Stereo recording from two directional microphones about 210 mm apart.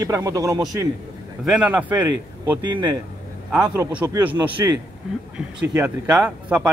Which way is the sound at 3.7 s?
10° right (ahead or behind).